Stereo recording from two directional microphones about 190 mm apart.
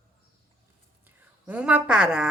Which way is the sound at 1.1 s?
5° right (ahead or behind).